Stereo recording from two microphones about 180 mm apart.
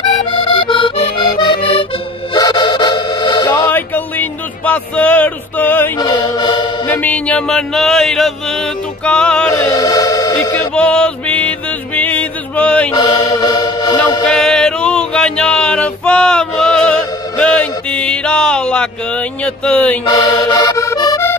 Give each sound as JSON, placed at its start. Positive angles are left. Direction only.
{"t": 0.3, "sound": "accordion", "side_deg": 30}
{"t": 2.3, "sound": "music", "side_deg": 20}
{"t": 3.7, "sound": "music", "side_deg": 10}
{"t": 5.9, "sound": "chant", "side_deg": 20}
{"t": 6.9, "sound": "music", "side_deg": 10}
{"t": 12.9, "sound": "music", "side_deg": 20}
{"t": 14.2, "sound": "music", "side_deg": 5}
{"t": 20.1, "sound": "music", "side_deg": 20}